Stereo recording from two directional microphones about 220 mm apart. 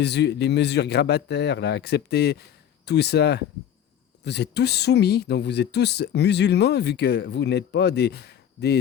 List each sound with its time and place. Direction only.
0.0 s speech: 50° left (ahead or behind)